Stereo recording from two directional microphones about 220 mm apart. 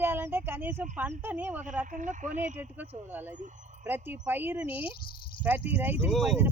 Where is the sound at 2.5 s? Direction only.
10° right (ahead or behind).